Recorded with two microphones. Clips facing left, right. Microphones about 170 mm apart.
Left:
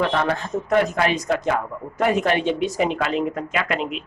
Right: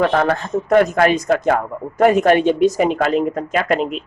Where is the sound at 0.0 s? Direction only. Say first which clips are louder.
Right 5 dB; 50° right (ahead or behind).